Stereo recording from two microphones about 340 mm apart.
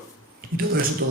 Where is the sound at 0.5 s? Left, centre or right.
Right.